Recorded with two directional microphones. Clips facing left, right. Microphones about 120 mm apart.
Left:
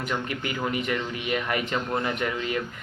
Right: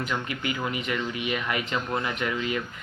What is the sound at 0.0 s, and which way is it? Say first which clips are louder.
Speech: even; 40° left (ahead or behind).